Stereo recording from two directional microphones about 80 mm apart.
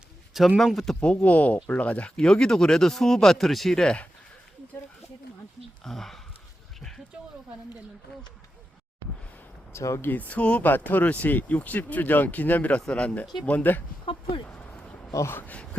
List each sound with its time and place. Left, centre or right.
0.3 s speech: centre
1.1 s speech: centre
5.8 s speech: centre
6.7 s a sound: centre
9.7 s speech: left
10.1 s speech: centre
14.0 s speech: left
14.4 s a sound: centre
15.1 s speech: left
15.4 s speech: left